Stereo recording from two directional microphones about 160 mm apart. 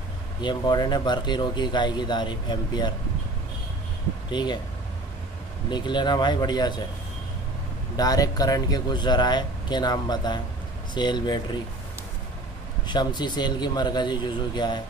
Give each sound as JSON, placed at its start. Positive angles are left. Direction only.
{"t": 0.4, "sound": "speech", "side_deg": 25}
{"t": 4.3, "sound": "speech", "side_deg": 25}
{"t": 5.7, "sound": "speech", "side_deg": 30}
{"t": 7.9, "sound": "speech", "side_deg": 25}
{"t": 12.8, "sound": "speech", "side_deg": 30}